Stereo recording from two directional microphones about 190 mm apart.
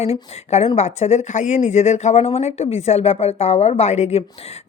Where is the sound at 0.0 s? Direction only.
35° left (ahead or behind).